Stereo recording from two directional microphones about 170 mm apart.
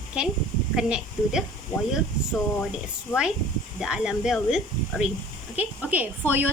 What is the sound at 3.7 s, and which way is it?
Female singing, 5° right (ahead or behind).